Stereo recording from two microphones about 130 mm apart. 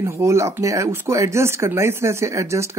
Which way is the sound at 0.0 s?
20° right (ahead or behind).